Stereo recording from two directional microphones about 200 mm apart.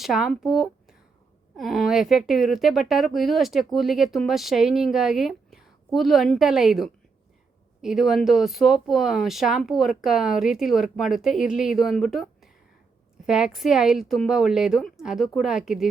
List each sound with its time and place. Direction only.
0.0 s a woman's voice: centre (ahead or behind)